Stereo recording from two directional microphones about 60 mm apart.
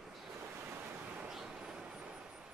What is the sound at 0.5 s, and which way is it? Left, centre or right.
Waves, right.